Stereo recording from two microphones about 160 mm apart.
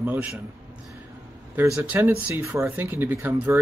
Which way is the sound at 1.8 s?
10° right (ahead or behind).